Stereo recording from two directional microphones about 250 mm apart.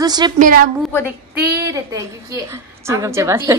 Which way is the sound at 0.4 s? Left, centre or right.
Right.